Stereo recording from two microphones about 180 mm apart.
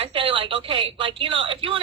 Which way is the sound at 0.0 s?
30° right (ahead or behind).